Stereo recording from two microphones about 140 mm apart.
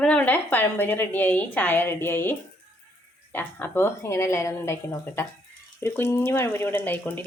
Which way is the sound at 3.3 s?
15° left (ahead or behind).